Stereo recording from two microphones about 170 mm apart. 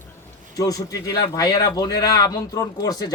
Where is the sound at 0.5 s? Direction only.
20° left (ahead or behind).